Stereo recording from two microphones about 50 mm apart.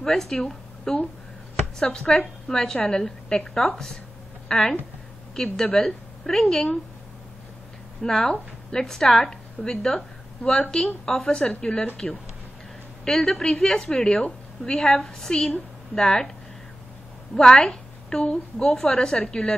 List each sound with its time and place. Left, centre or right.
0.0 s a woman's voice: centre
8.0 s a woman's voice: centre
17.4 s a woman's voice: centre